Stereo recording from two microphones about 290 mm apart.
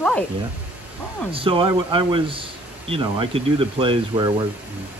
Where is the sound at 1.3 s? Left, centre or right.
Centre.